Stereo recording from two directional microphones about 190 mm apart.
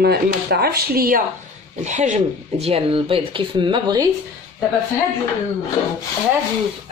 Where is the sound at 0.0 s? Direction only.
55° right (ahead or behind).